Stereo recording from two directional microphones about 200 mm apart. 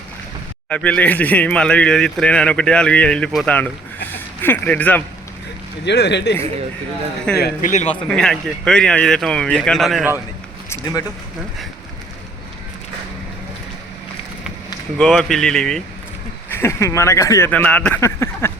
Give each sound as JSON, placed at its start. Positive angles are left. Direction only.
{"t": 0.7, "sound": "speech", "side_deg": 5}
{"t": 5.8, "sound": "speech", "side_deg": 60}
{"t": 7.3, "sound": "speech", "side_deg": 50}
{"t": 7.7, "sound": "speech", "side_deg": 35}
{"t": 8.0, "sound": "speech", "side_deg": 5}
{"t": 14.9, "sound": "speech", "side_deg": 5}